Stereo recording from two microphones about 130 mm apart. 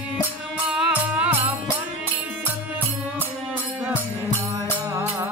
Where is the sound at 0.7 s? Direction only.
10° right (ahead or behind).